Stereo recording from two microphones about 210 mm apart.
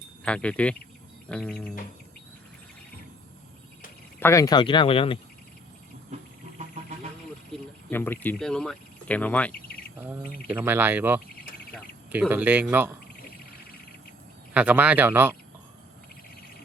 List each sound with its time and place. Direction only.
0.3 s speech: 5° left (ahead or behind)
4.2 s speech: 15° left (ahead or behind)
7.9 s speech: 10° left (ahead or behind)
10.5 s speech: 10° right (ahead or behind)
14.5 s speech: 5° right (ahead or behind)